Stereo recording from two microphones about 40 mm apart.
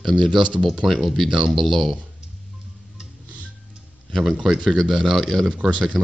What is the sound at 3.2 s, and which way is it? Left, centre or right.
Music, right.